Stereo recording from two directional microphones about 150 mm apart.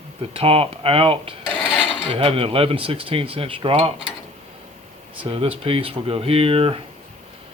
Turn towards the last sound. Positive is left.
turn(degrees=-40)  # may be behind; listen again after turning